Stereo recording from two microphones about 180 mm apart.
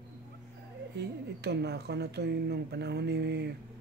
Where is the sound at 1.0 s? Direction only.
65° right (ahead or behind).